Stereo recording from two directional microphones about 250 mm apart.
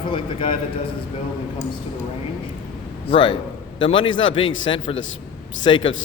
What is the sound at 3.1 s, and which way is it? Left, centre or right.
Speech, left.